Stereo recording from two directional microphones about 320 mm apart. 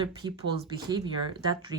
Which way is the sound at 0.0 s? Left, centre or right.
Centre.